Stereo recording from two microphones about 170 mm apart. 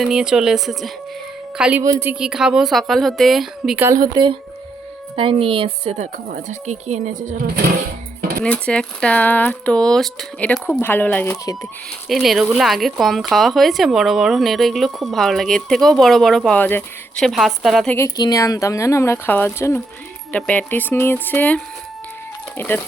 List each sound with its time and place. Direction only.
0.0 s speech: 5° right (ahead or behind)
1.8 s speech: 15° right (ahead or behind)
3.8 s a woman's voice: 20° right (ahead or behind); by 7.5 s 50° right (ahead or behind)
8.4 s speech: 5° left (ahead or behind)
12.0 s speech: centre (ahead or behind)
17.9 s speech: 20° left (ahead or behind)